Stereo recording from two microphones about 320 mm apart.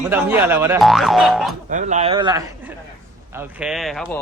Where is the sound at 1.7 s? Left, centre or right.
Right.